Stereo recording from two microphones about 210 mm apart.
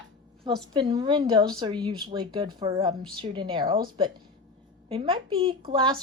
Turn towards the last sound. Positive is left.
turn(degrees=-20)  # may be behind; listen again after turning